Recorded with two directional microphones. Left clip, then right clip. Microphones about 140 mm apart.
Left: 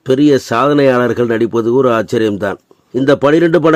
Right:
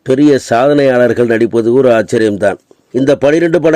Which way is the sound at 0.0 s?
15° right (ahead or behind).